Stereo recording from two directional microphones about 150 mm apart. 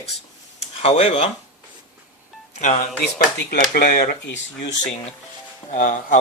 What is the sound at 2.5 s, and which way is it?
Speech, 50° left (ahead or behind).